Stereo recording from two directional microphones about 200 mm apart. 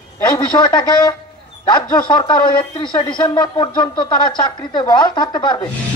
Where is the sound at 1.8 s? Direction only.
20° left (ahead or behind).